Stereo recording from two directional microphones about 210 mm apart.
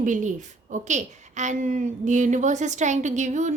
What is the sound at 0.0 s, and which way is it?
A woman's voice, 35° right (ahead or behind).